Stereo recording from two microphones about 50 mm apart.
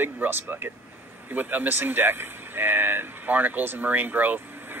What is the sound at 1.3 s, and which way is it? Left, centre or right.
Speech, right.